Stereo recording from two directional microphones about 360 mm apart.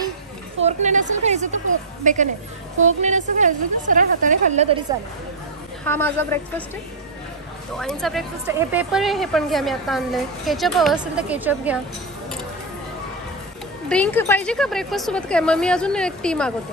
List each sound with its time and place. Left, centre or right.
0.7 s a woman's voice: centre
5.9 s speech: centre
7.7 s speech: centre
13.8 s speech: centre